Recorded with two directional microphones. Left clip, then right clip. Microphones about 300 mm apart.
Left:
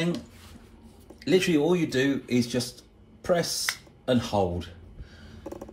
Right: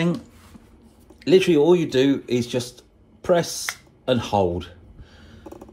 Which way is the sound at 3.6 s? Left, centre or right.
Centre.